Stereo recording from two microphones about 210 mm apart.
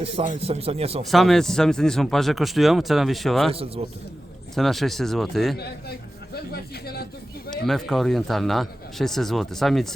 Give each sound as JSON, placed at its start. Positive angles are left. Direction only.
{"t": 0.3, "sound": "a man's voice", "side_deg": -30}
{"t": 1.0, "sound": "speech", "side_deg": 0}
{"t": 4.5, "sound": "speech", "side_deg": 0}
{"t": 6.3, "sound": "speech", "side_deg": 50}
{"t": 7.5, "sound": "speech", "side_deg": 0}